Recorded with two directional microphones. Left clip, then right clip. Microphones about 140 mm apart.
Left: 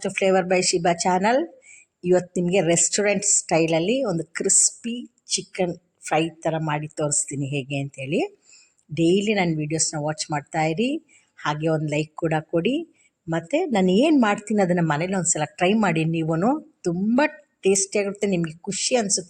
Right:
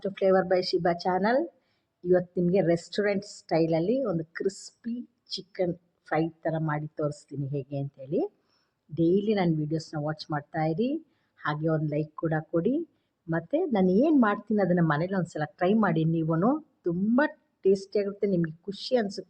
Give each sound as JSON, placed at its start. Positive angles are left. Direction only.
{"t": 0.0, "sound": "a woman's voice", "side_deg": 30}
{"t": 14.8, "sound": "a woman's voice", "side_deg": 25}
{"t": 17.2, "sound": "a sound", "side_deg": 35}
{"t": 17.9, "sound": "a woman's voice", "side_deg": 25}